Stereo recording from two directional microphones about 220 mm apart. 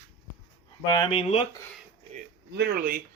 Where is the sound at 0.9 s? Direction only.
20° left (ahead or behind).